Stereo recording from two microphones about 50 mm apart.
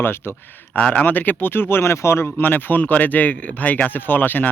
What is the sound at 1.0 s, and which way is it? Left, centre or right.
Speech, left.